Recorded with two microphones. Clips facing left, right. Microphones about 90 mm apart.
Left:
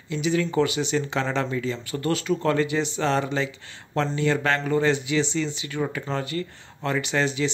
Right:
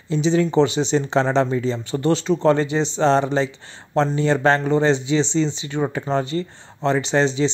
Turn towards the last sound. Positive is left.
turn(degrees=-30)  # may be behind; listen again after turning